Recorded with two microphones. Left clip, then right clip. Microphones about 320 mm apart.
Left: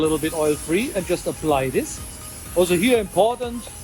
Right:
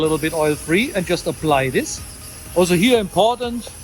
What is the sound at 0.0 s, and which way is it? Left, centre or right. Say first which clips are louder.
Speech: right 2 dB; right.